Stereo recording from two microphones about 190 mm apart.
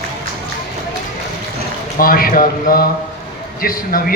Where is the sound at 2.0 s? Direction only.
50° left (ahead or behind).